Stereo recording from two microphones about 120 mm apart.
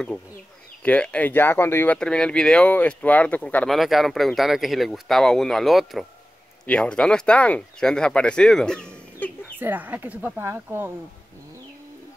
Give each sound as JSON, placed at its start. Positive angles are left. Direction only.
{"t": 0.8, "sound": "speech", "side_deg": 10}
{"t": 2.0, "sound": "speech", "side_deg": 5}
{"t": 3.6, "sound": "speech", "side_deg": 0}
{"t": 9.6, "sound": "speech", "side_deg": -15}